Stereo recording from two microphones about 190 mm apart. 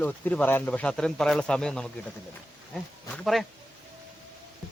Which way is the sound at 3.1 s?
Centre (ahead or behind).